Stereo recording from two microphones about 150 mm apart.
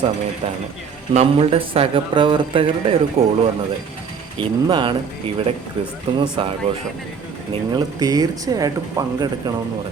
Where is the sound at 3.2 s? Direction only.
75° right (ahead or behind).